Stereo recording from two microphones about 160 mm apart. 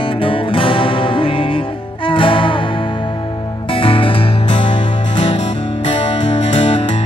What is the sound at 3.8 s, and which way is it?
Music, 35° left (ahead or behind).